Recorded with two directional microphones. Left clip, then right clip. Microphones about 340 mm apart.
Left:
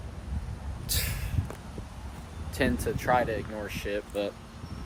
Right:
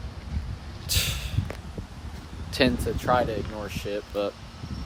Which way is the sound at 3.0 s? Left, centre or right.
Centre.